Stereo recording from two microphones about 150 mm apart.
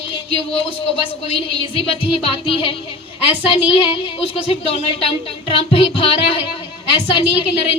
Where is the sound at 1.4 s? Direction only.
40° left (ahead or behind).